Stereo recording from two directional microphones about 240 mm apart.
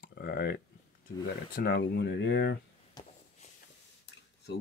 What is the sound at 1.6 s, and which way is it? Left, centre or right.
Speech, left.